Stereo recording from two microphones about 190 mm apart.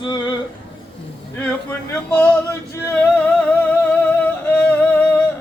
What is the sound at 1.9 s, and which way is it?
Male singing, 10° left (ahead or behind).